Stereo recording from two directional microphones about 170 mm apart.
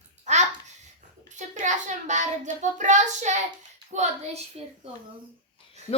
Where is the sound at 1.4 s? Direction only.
45° right (ahead or behind).